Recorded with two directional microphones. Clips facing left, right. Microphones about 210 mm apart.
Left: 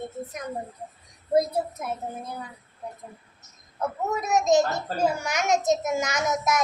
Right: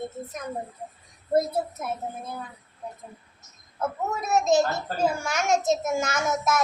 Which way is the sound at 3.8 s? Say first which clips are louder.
Left 1 dB; 15° left (ahead or behind).